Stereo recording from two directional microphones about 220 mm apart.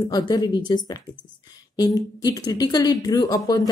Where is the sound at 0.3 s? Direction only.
20° left (ahead or behind).